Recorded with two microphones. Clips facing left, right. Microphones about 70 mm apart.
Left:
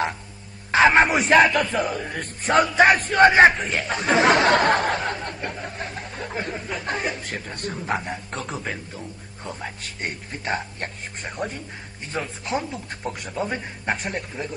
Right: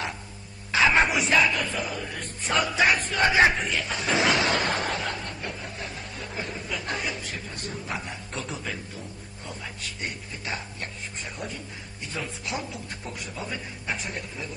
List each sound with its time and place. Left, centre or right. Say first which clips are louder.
0.7 s speech: left 5 dB; left